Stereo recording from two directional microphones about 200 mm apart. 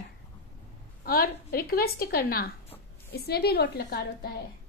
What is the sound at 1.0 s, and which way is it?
A woman's voice, 50° left (ahead or behind).